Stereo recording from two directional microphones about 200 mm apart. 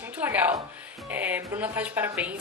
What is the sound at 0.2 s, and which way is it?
A woman's voice, 10° right (ahead or behind).